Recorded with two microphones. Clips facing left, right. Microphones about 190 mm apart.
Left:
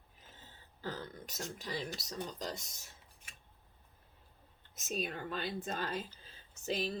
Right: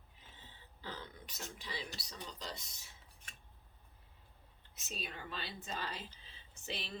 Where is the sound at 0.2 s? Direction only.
45° left (ahead or behind).